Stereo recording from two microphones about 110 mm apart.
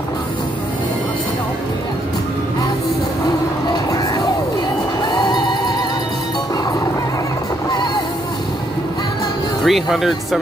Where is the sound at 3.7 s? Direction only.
35° left (ahead or behind).